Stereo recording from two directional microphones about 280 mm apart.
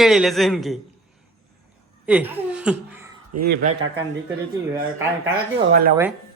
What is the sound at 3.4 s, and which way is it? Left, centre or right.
Speech, right.